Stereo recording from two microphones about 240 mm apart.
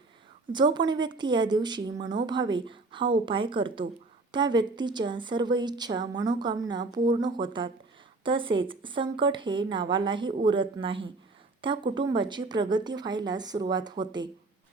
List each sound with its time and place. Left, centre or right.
0.5 s a woman's voice: centre